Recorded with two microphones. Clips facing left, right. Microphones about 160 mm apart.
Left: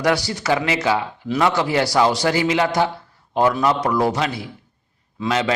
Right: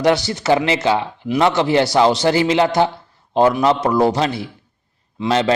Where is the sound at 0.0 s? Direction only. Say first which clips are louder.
Right 4 dB; 25° right (ahead or behind).